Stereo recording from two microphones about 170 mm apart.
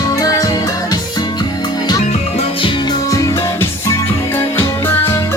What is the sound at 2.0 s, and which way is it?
Music, 35° left (ahead or behind).